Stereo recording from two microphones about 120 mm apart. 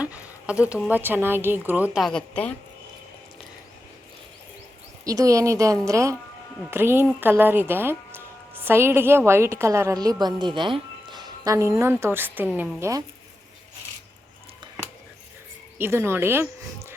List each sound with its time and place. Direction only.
0.0 s a woman's voice: 10° right (ahead or behind)
2.0 s a woman's voice: centre (ahead or behind)
2.3 s speech: 10° left (ahead or behind)
5.0 s a woman's voice: 30° right (ahead or behind)
11.5 s a woman's voice: 25° right (ahead or behind)
15.8 s a woman's voice: 20° right (ahead or behind)